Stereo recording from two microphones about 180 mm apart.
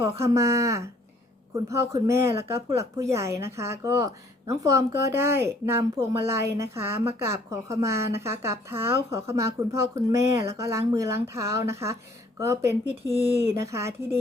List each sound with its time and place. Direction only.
0.2 s a woman's voice: 15° right (ahead or behind)